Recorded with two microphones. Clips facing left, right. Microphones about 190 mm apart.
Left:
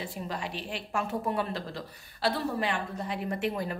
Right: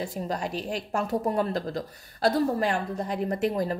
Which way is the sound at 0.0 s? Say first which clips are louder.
Right 5 dB; 40° right (ahead or behind).